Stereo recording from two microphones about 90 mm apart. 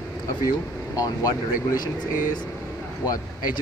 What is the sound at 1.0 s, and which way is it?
Speech, 45° left (ahead or behind).